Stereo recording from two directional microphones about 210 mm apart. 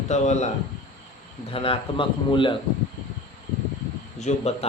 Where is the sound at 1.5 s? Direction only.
25° left (ahead or behind).